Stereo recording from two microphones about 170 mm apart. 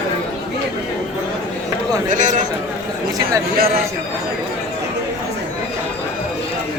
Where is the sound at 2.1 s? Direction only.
50° right (ahead or behind).